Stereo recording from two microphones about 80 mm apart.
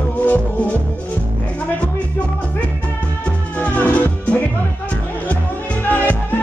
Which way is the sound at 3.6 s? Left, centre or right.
Centre.